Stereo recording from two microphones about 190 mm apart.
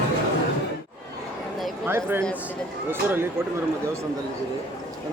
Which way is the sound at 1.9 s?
10° right (ahead or behind).